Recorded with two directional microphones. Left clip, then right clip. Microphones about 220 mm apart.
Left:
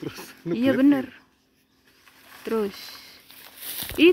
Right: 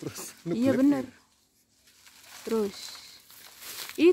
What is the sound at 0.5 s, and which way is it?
Speech, 5° right (ahead or behind).